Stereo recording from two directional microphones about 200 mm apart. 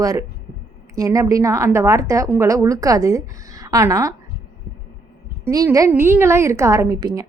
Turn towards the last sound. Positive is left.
turn(degrees=-20)  # may be behind; listen again after turning